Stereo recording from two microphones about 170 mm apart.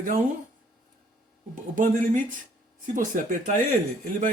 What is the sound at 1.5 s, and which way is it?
A man's voice, 50° right (ahead or behind).